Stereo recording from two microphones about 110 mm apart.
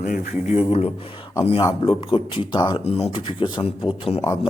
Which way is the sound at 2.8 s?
65° left (ahead or behind).